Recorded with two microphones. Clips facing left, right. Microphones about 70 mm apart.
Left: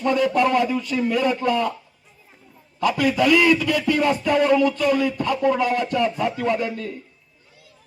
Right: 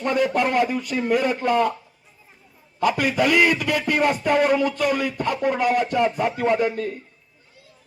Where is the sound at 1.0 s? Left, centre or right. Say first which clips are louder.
Right 1 dB; right.